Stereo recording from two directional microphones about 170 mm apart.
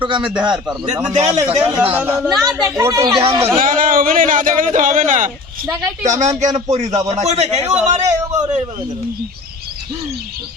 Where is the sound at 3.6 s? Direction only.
55° right (ahead or behind).